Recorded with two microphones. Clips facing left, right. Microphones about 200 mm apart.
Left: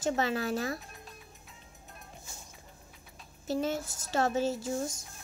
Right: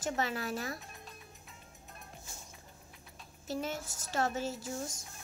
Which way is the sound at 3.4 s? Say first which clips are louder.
Left 6 dB; 30° left (ahead or behind).